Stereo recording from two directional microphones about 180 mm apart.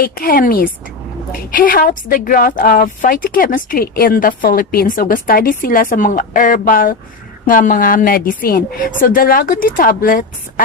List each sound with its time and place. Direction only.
0.0 s a woman's voice: 55° left (ahead or behind)